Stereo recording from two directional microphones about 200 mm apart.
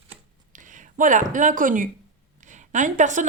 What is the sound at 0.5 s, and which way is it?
A woman's voice, 40° right (ahead or behind).